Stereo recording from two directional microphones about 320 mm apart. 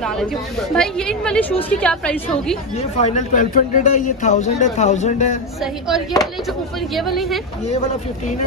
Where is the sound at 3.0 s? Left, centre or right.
Left.